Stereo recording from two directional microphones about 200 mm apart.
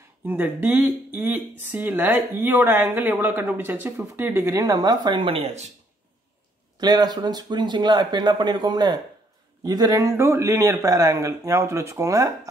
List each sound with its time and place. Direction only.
0.2 s speech: 10° right (ahead or behind); by 5.7 s 30° right (ahead or behind)
6.8 s speech: 20° right (ahead or behind)